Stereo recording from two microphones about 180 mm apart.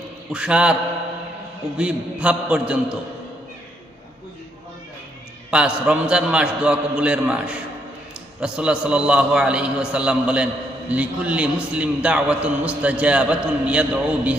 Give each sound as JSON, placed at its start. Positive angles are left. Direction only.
{"t": 0.3, "sound": "a man's voice", "side_deg": -5}
{"t": 1.8, "sound": "a man's voice", "side_deg": -5}
{"t": 5.5, "sound": "a man's voice", "side_deg": -5}